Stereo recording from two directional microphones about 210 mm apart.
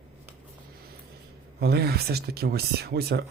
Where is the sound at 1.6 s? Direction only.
50° right (ahead or behind).